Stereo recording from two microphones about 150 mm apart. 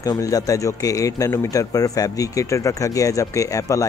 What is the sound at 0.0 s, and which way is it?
Speech, 20° left (ahead or behind).